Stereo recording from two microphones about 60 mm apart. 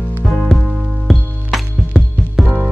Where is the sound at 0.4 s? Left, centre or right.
Centre.